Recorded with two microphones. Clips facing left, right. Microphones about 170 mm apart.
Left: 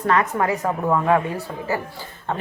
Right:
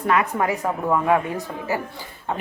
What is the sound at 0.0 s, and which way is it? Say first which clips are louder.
Speech: left 1 dB; 10° right (ahead or behind).